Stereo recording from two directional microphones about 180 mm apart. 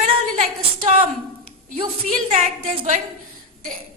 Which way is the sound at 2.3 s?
40° right (ahead or behind).